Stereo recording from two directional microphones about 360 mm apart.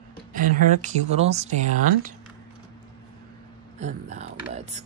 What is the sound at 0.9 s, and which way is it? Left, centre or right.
Speech, centre.